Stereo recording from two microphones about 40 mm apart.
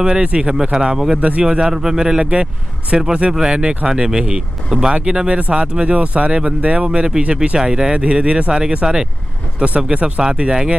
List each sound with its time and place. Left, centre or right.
0.0 s speech: right
1.1 s a man's voice: right
1.4 s speech: centre